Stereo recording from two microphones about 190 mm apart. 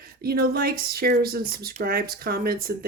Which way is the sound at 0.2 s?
55° right (ahead or behind).